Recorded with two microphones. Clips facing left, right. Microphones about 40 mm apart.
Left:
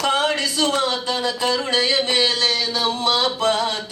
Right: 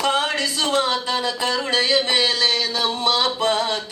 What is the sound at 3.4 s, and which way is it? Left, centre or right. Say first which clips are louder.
Speech: left 1 dB; centre.